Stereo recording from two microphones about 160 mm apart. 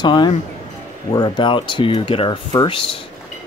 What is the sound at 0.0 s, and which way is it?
Speech, 30° left (ahead or behind).